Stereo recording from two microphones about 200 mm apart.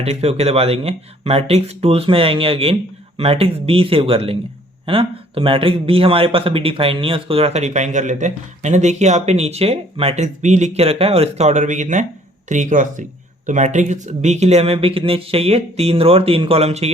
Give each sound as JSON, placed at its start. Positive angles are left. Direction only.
{"t": 0.0, "sound": "speech", "side_deg": -30}